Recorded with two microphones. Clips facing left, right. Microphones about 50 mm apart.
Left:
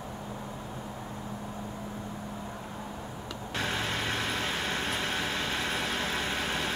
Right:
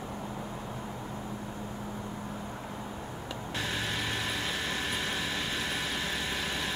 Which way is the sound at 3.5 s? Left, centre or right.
Left.